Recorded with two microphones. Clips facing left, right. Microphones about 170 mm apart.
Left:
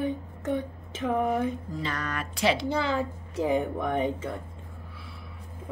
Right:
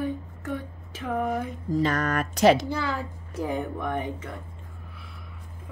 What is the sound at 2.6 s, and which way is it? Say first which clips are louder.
Speech: left 3 dB; 25° left (ahead or behind).